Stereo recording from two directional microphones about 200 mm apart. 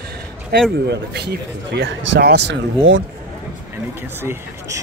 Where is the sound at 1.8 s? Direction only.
70° right (ahead or behind).